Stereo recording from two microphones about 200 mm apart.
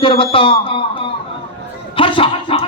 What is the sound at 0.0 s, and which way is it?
Speech, 25° left (ahead or behind).